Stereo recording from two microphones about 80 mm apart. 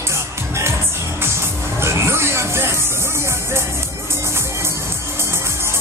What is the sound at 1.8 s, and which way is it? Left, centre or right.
Music, right.